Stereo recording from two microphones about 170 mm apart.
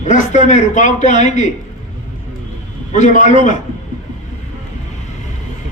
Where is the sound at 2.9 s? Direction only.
45° left (ahead or behind).